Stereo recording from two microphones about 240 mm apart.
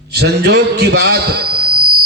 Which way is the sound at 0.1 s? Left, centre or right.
Right.